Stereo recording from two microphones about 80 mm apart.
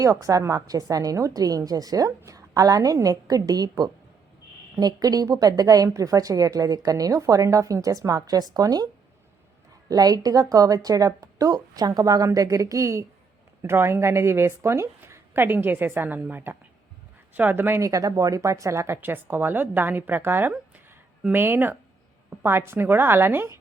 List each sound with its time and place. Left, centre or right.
0.0 s a woman's voice: right
9.9 s a woman's voice: right
17.7 s speech: right
18.9 s a woman's voice: right